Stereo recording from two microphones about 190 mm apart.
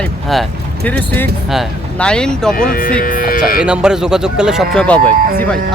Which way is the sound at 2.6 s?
45° left (ahead or behind).